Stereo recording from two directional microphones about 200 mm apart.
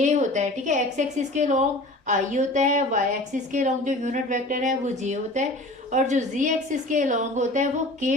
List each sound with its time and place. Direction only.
0.0 s a woman's voice: 35° right (ahead or behind)